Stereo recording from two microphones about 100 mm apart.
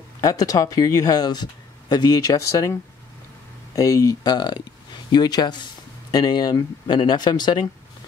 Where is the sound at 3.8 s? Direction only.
35° left (ahead or behind).